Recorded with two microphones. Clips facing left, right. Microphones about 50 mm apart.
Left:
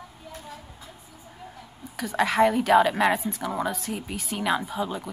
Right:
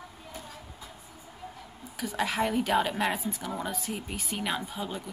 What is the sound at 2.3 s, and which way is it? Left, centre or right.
Speech, centre.